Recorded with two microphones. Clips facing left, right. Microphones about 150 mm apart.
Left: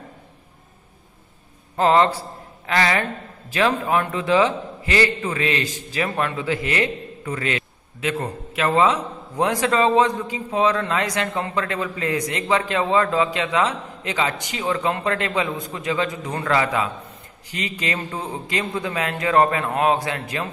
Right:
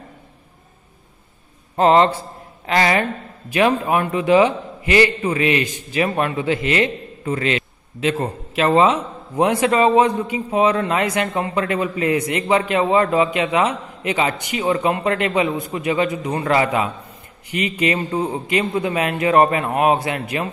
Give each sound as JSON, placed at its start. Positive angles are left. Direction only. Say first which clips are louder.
{"t": 1.8, "sound": "a man's voice", "louder": "right 3 dB", "side_deg": -20}